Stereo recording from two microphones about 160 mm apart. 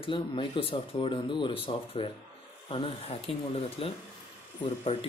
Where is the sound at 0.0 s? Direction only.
35° left (ahead or behind).